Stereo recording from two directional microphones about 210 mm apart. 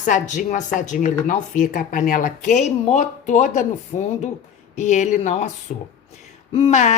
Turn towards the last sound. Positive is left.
turn(degrees=35)  # may be behind; listen again after turning